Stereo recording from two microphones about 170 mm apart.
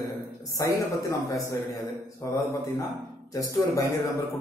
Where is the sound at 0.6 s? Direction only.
20° left (ahead or behind).